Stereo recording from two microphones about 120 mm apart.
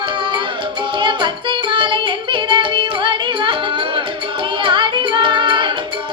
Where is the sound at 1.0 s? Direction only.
40° right (ahead or behind).